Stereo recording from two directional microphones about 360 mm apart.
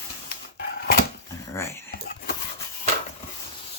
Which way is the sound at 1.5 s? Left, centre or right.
Centre.